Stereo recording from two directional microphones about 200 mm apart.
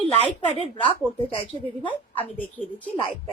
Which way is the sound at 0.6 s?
25° left (ahead or behind).